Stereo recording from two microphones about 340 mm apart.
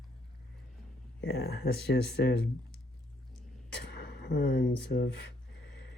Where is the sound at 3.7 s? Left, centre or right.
Left.